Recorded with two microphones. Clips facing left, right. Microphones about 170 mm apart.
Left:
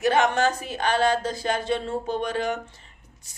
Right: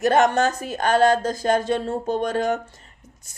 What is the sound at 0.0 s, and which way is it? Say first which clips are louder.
Speech: right 3 dB; 45° right (ahead or behind).